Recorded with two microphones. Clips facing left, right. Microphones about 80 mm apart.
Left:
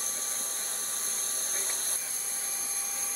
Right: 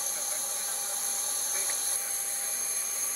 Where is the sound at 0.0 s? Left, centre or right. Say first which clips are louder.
Right 1 dB; left.